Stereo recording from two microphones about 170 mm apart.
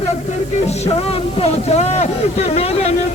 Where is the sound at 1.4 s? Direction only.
40° left (ahead or behind).